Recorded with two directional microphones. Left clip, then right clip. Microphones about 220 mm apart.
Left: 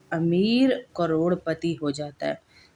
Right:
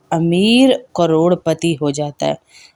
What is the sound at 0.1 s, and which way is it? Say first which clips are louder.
A woman's voice: right 9 dB; 30° right (ahead or behind).